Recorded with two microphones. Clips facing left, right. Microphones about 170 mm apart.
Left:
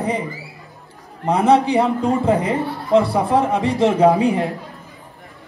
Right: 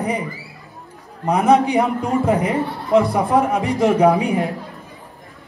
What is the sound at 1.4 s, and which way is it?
A woman's voice, 35° left (ahead or behind).